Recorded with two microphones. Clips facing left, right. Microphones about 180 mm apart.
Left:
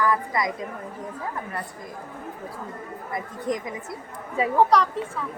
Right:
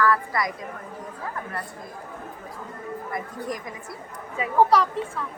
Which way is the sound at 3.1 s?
20° left (ahead or behind).